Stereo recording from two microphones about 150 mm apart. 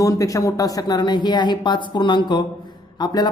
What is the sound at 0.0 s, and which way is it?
A man's voice, 20° left (ahead or behind).